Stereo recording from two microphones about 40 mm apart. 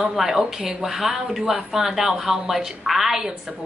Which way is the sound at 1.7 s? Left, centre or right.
Centre.